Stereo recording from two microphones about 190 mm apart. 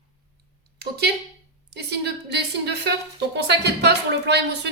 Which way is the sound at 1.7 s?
60° right (ahead or behind).